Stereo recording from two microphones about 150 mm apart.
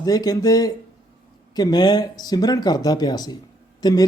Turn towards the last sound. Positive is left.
turn(degrees=25)  # may be behind; listen again after turning